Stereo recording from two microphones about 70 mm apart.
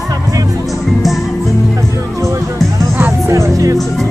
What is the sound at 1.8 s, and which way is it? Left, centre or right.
Music, right.